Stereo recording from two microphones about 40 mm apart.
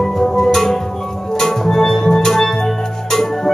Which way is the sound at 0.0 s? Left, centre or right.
Centre.